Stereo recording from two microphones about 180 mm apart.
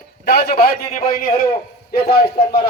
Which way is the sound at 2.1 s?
60° left (ahead or behind).